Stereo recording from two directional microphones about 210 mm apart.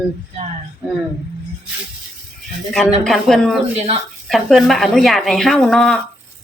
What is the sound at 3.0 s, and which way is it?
Speech, centre (ahead or behind).